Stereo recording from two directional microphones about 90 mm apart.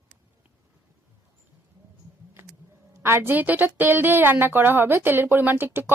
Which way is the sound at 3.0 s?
30° right (ahead or behind).